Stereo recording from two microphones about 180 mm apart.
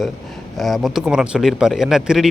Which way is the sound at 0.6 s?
Centre (ahead or behind).